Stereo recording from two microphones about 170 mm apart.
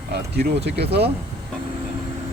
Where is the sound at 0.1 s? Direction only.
70° right (ahead or behind).